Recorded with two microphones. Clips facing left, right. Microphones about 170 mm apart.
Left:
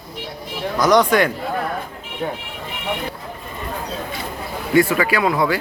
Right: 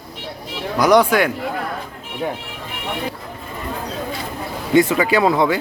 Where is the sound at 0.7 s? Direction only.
10° right (ahead or behind).